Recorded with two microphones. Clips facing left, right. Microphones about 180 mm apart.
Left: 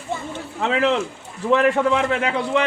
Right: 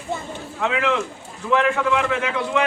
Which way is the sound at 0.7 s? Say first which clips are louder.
Left 4 dB; 35° left (ahead or behind).